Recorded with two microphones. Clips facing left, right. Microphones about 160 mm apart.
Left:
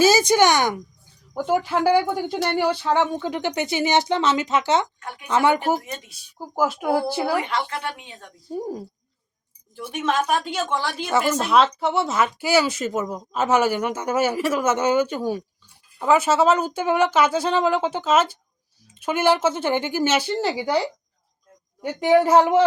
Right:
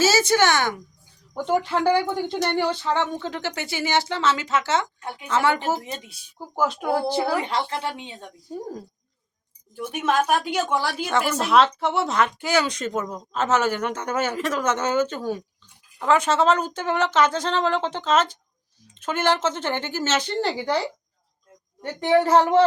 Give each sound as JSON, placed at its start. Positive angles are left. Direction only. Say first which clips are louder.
{"t": 0.0, "sound": "speech", "louder": "left 3 dB", "side_deg": 15}
{"t": 4.9, "sound": "speech", "louder": "right 2 dB", "side_deg": -20}
{"t": 5.3, "sound": "speech", "louder": "left 3 dB", "side_deg": 15}
{"t": 7.4, "sound": "speech", "louder": "right 1 dB", "side_deg": -30}
{"t": 8.5, "sound": "speech", "louder": "left 4 dB", "side_deg": 15}
{"t": 9.9, "sound": "a woman's voice", "louder": "right 1 dB", "side_deg": -5}